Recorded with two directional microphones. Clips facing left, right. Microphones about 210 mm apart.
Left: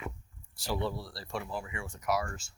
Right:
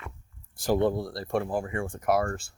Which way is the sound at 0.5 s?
50° right (ahead or behind).